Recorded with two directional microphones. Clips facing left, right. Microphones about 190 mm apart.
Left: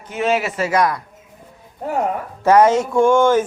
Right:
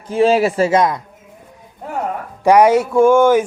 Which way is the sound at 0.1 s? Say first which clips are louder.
Right 6 dB; 35° right (ahead or behind).